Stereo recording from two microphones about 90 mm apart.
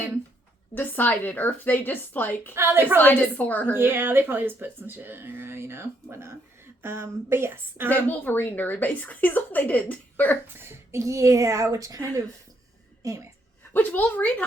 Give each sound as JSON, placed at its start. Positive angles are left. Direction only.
{"t": 0.7, "sound": "speech", "side_deg": 20}
{"t": 2.6, "sound": "speech", "side_deg": -25}
{"t": 3.0, "sound": "speech", "side_deg": 20}
{"t": 3.7, "sound": "speech", "side_deg": -25}
{"t": 7.9, "sound": "speech", "side_deg": 15}
{"t": 10.4, "sound": "a woman's voice", "side_deg": -25}
{"t": 13.7, "sound": "a woman's voice", "side_deg": 20}